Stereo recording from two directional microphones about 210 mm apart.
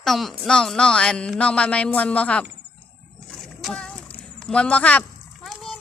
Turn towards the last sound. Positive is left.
turn(degrees=0)  # may be behind; listen again after turning